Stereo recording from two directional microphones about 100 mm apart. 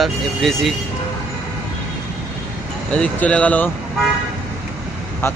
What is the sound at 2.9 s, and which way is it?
Speech, 10° left (ahead or behind).